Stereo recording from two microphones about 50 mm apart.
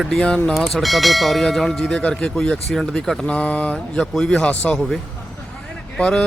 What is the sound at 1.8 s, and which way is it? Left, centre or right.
Speech, centre.